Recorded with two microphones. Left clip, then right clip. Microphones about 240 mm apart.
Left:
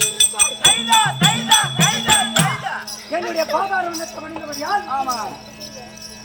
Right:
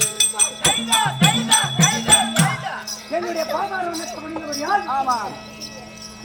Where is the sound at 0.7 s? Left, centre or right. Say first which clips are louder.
Left 3 dB; centre.